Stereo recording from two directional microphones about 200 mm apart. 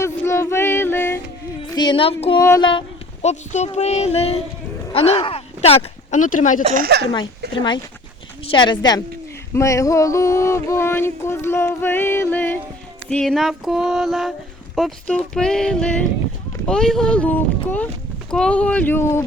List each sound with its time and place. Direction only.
0.0 s a sound: 15° left (ahead or behind)
1.7 s child singing: 20° left (ahead or behind)
2.4 s speech: 20° left (ahead or behind); by 6.6 s 40° left (ahead or behind)
6.7 s speech: 55° right (ahead or behind)
7.5 s child singing: 25° left (ahead or behind)
9.6 s a sound: 15° left (ahead or behind)